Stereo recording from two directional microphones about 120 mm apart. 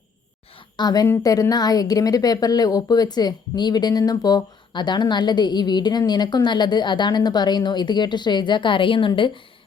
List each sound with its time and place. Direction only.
0.8 s a woman's voice: 35° left (ahead or behind)